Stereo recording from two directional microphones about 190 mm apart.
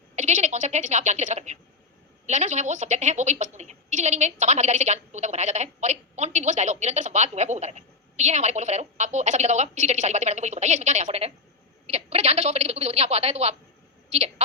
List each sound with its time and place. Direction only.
0.2 s a woman's voice: 40° right (ahead or behind)